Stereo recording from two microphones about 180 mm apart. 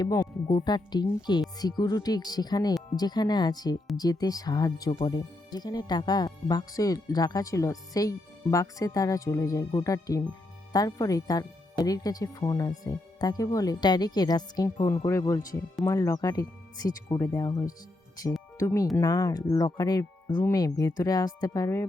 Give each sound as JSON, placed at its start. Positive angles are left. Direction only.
{"t": 0.0, "sound": "speech", "side_deg": 15}